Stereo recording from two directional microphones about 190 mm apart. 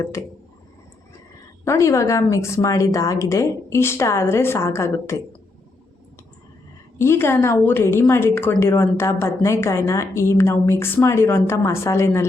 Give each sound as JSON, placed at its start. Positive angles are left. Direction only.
{"t": 0.0, "sound": "a woman's voice", "side_deg": 15}
{"t": 1.6, "sound": "a woman's voice", "side_deg": 15}
{"t": 7.0, "sound": "a woman's voice", "side_deg": 15}